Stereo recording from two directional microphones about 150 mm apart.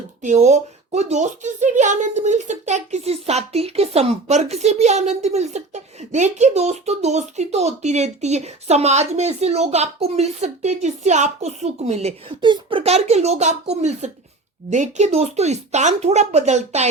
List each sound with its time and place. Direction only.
0.2 s speech: 55° right (ahead or behind)
12.4 s speech: 35° right (ahead or behind); by 16.9 s 50° right (ahead or behind)